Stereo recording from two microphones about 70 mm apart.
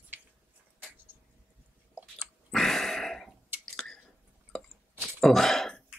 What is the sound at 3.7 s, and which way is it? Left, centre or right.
Chewing, centre.